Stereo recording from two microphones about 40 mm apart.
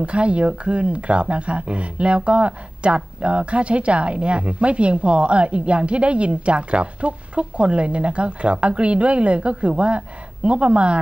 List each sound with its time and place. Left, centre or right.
0.0 s speech: right